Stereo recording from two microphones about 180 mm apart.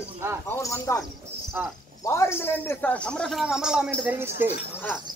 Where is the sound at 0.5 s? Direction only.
15° left (ahead or behind).